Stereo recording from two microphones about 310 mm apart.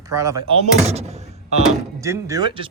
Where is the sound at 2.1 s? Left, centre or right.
Centre.